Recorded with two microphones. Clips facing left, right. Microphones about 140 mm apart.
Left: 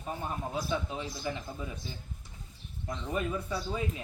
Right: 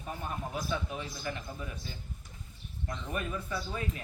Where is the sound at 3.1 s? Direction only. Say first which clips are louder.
Left 4 dB; 15° left (ahead or behind).